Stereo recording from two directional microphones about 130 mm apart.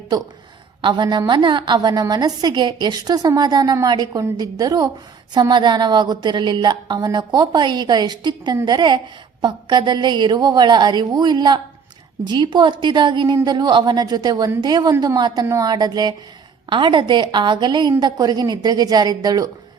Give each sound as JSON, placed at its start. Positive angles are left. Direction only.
{"t": 0.8, "sound": "a woman's voice", "side_deg": -35}